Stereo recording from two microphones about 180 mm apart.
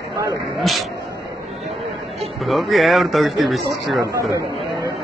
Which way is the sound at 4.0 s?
15° right (ahead or behind).